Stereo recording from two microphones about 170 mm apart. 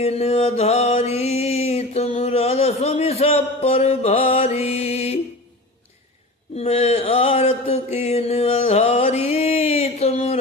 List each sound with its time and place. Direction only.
0.0 s music: 35° left (ahead or behind)
6.6 s mantra: 40° left (ahead or behind)